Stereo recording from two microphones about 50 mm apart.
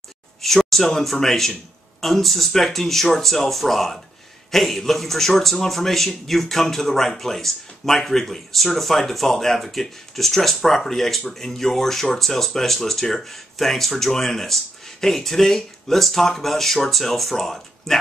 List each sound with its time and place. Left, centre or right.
0.4 s speech: centre